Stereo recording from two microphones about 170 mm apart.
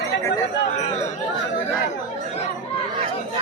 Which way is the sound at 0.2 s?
20° left (ahead or behind).